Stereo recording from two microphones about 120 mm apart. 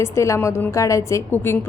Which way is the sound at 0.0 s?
25° left (ahead or behind).